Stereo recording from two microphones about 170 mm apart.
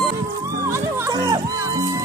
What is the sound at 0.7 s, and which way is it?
Music, 15° right (ahead or behind).